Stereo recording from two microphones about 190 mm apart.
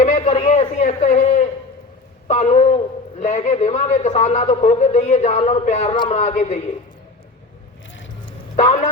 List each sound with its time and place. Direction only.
0.0 s a sound: 35° left (ahead or behind)
2.2 s a man's voice: 35° left (ahead or behind)
8.5 s a man's voice: 35° left (ahead or behind)